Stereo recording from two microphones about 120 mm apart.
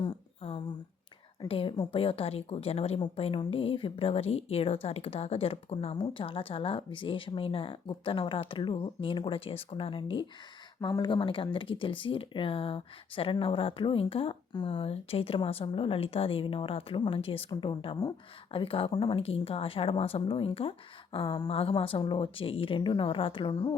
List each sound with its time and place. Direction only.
0.0 s a sound: 45° left (ahead or behind)
1.5 s speech: 50° left (ahead or behind)
10.8 s speech: 30° left (ahead or behind)